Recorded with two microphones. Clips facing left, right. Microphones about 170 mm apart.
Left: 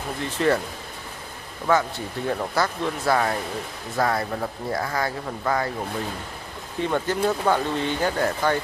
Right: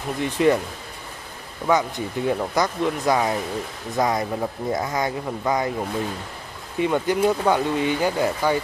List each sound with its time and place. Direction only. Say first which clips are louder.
0.2 s speech: right 3 dB; 15° right (ahead or behind)
1.7 s speech: right 1 dB; 15° right (ahead or behind)
6.8 s speech: right 3 dB; 10° right (ahead or behind)